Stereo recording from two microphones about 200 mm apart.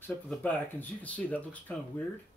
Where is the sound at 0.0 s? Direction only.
10° left (ahead or behind).